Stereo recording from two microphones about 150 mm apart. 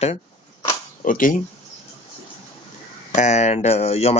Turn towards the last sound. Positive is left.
turn(degrees=45)  # may be behind; listen again after turning